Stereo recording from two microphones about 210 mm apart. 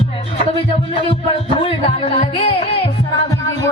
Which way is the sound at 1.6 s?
25° left (ahead or behind).